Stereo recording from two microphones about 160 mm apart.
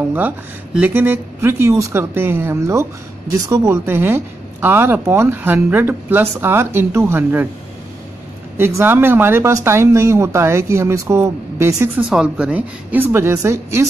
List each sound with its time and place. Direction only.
0.7 s speech: 10° right (ahead or behind)
8.5 s speech: 15° right (ahead or behind)
12.1 s speech: 5° right (ahead or behind)